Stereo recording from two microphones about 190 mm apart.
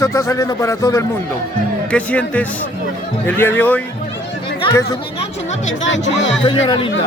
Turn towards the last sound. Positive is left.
turn(degrees=25)  # may be behind; listen again after turning